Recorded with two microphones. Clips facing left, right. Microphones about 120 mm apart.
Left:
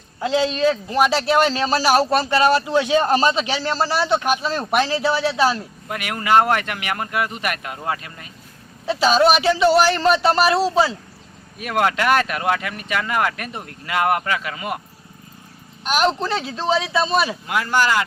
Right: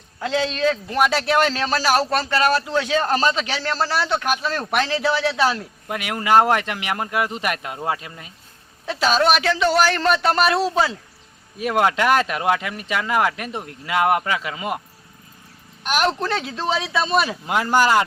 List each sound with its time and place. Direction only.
0.2 s a man's voice: 5° left (ahead or behind)
5.9 s speech: 15° right (ahead or behind)
8.9 s a man's voice: 5° left (ahead or behind)
11.6 s speech: 15° right (ahead or behind)
15.9 s a man's voice: centre (ahead or behind)
17.4 s speech: 25° right (ahead or behind)